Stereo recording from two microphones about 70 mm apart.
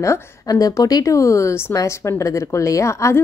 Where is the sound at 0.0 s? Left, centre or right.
Left.